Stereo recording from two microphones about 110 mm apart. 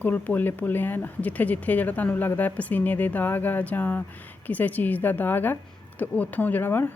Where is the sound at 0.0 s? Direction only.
15° left (ahead or behind).